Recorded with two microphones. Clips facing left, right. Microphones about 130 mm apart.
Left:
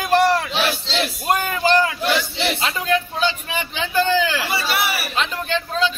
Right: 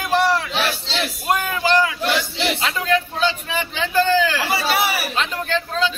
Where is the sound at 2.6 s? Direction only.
20° left (ahead or behind).